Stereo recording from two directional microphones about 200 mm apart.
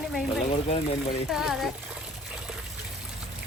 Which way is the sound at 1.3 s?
Centre (ahead or behind).